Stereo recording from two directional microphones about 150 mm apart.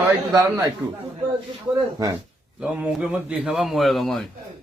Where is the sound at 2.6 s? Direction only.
10° right (ahead or behind).